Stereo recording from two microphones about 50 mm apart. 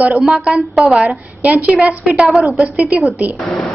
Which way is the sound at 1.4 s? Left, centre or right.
Right.